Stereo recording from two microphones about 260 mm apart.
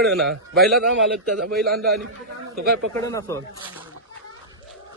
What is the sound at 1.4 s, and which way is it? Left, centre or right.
A man's voice, right.